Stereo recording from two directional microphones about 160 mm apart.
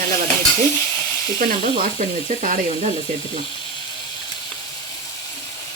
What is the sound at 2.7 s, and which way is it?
Speech, 40° right (ahead or behind).